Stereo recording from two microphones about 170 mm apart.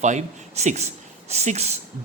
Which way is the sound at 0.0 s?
45° right (ahead or behind).